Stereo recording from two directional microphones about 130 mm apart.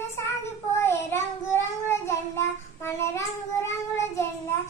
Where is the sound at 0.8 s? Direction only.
20° left (ahead or behind).